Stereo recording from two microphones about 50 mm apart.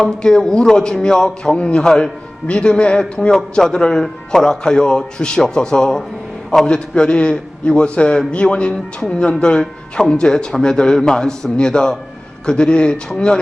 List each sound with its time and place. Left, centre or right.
0.0 s a man's voice: centre